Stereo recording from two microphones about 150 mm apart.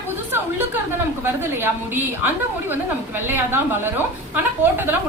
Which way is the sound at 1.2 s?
15° right (ahead or behind).